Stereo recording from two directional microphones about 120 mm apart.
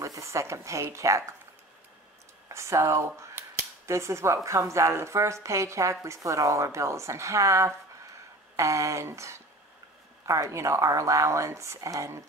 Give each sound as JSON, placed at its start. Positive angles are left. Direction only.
{"t": 0.0, "sound": "a woman's voice", "side_deg": -25}
{"t": 2.4, "sound": "speech", "side_deg": -25}